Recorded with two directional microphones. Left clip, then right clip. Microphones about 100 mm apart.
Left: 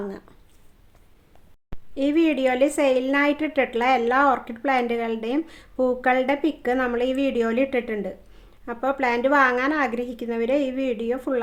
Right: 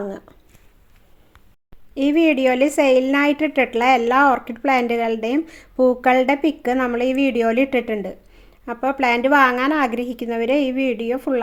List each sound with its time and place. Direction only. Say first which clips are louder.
2.0 s speech: right 4 dB; 35° right (ahead or behind)